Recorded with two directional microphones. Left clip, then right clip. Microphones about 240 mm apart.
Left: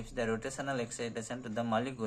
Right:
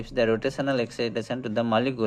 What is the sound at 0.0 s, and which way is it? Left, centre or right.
Speech, right.